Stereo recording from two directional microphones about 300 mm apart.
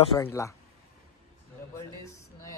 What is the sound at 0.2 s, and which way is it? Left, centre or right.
Speech, centre.